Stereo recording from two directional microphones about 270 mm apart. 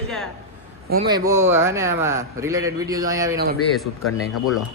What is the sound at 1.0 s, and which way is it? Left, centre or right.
A man's voice, centre.